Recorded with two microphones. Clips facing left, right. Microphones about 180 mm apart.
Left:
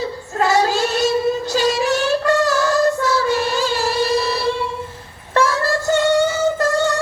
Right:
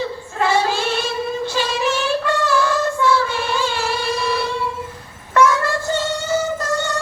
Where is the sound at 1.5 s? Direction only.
40° left (ahead or behind).